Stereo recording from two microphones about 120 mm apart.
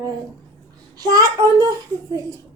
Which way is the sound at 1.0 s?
30° right (ahead or behind).